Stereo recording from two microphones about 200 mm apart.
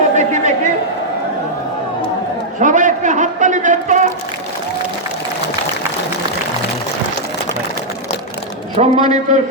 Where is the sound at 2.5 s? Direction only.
40° right (ahead or behind).